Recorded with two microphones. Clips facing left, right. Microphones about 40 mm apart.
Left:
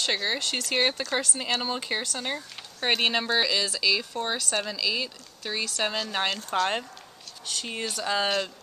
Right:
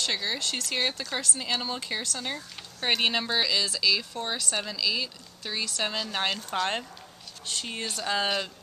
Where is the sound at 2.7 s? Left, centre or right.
Centre.